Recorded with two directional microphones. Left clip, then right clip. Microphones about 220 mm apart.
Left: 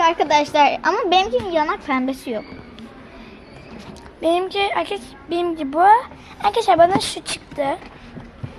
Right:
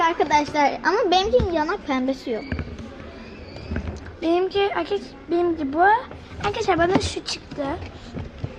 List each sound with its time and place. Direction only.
0.0 s a woman's voice: 55° left (ahead or behind)
4.2 s a woman's voice: 20° left (ahead or behind)